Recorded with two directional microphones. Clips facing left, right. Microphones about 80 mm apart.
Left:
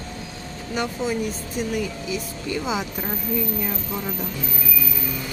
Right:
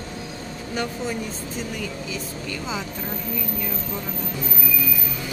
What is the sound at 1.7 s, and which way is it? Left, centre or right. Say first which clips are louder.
Speech: left 4 dB; centre.